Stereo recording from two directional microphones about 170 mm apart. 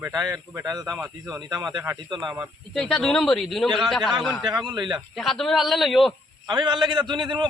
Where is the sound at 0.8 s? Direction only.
20° right (ahead or behind).